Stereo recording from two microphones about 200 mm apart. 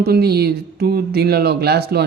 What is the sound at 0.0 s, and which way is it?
Speech, 50° right (ahead or behind).